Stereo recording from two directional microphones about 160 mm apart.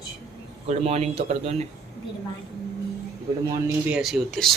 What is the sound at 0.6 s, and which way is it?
Speech, 45° right (ahead or behind).